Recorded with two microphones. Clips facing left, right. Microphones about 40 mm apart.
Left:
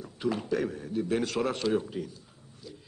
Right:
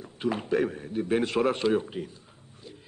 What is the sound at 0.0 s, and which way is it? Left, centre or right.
A man's voice, right.